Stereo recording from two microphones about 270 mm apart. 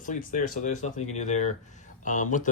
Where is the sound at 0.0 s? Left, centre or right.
Left.